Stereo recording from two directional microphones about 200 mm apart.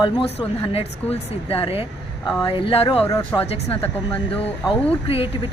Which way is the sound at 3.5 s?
30° left (ahead or behind).